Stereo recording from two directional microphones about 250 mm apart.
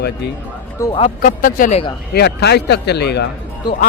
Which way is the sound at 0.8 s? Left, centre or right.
Left.